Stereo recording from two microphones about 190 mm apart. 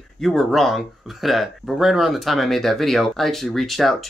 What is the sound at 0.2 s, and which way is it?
Speech, centre (ahead or behind).